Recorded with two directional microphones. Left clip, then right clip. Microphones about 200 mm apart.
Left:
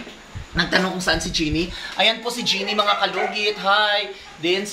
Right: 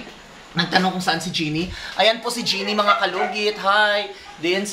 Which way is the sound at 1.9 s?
30° right (ahead or behind).